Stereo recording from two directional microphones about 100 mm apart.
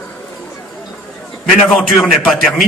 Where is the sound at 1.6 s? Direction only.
10° left (ahead or behind).